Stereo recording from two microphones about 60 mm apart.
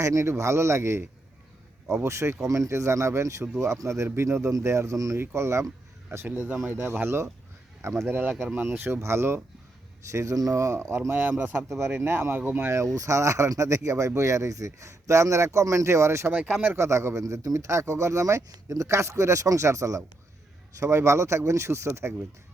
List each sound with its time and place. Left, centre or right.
0.0 s speech: right
2.0 s speech: right
5.1 s speech: right
6.3 s speech: right
10.1 s speech: right
11.3 s speech: right
11.5 s speech: right
12.9 s speech: right
16.3 s speech: centre
16.7 s speech: right